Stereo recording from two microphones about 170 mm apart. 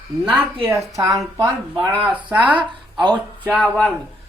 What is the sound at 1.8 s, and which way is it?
Speech, 5° right (ahead or behind).